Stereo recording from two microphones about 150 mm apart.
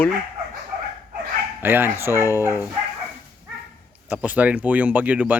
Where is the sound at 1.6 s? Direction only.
15° right (ahead or behind).